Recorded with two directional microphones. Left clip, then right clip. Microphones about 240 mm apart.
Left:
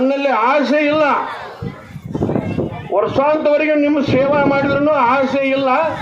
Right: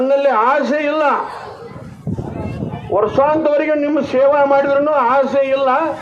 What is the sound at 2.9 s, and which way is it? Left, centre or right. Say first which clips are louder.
A man's voice: right 1 dB; right.